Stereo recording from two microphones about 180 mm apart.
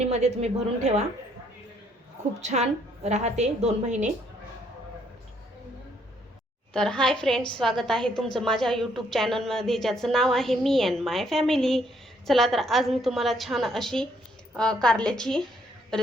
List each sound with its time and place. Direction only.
0.0 s a woman's voice: 35° right (ahead or behind)
2.4 s a woman's voice: 40° right (ahead or behind)
6.7 s a woman's voice: 5° left (ahead or behind)